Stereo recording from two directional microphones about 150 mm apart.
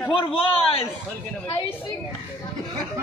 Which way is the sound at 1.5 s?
20° left (ahead or behind).